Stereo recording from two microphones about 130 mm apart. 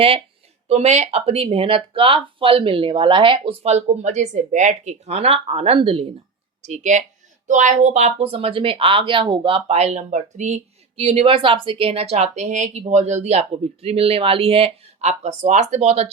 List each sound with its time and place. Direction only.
0.7 s speech: 55° right (ahead or behind)
6.7 s speech: 65° right (ahead or behind)